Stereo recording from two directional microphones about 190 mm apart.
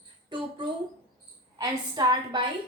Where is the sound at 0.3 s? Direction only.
25° right (ahead or behind).